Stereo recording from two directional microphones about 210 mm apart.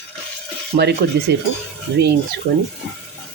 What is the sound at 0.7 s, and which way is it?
Speech, 35° right (ahead or behind).